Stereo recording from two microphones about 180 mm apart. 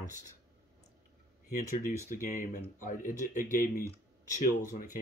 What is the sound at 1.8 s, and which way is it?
Speech, 45° left (ahead or behind).